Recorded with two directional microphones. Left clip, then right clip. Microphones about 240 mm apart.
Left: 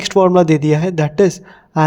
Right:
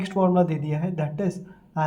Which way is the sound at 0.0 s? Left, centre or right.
Left.